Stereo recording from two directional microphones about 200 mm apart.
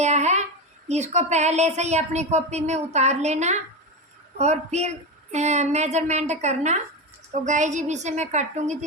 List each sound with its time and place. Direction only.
0.0 s speech: 35° right (ahead or behind)